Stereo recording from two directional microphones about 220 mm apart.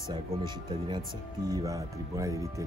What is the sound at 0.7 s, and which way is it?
Speech, 20° right (ahead or behind).